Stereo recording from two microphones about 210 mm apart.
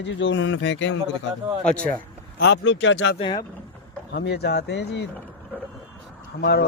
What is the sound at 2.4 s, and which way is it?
Speech, 55° left (ahead or behind).